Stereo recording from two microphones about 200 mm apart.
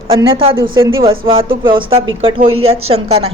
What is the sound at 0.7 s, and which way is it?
A woman's voice, 25° right (ahead or behind).